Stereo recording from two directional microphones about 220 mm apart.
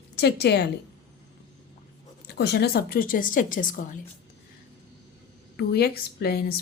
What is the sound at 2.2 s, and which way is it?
Speech, 50° left (ahead or behind).